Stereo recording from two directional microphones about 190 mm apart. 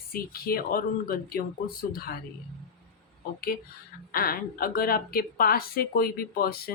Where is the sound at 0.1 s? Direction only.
50° left (ahead or behind).